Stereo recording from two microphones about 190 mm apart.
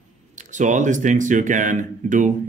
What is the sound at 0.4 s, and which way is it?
Speech, 40° right (ahead or behind).